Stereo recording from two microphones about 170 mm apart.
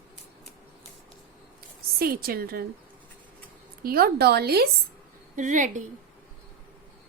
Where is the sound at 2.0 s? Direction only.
60° right (ahead or behind).